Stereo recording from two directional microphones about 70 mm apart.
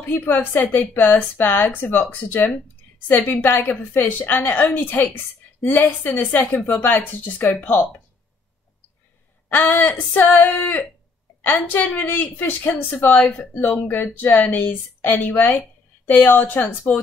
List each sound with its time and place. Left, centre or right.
0.0 s a woman's voice: left
9.5 s speech: left